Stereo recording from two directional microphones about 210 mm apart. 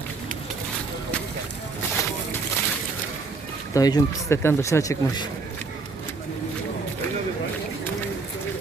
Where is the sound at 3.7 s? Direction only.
15° left (ahead or behind).